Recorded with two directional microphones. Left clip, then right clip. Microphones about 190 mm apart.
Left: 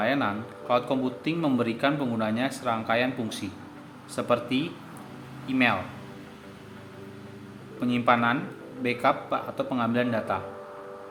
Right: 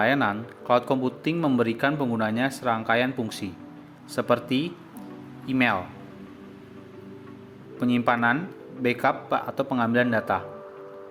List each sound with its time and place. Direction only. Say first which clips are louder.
0.0 s speech: right 3 dB; 35° right (ahead or behind)
7.8 s speech: even; 35° right (ahead or behind)